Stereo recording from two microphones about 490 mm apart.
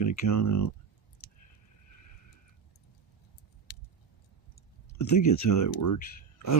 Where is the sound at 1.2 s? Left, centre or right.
Left.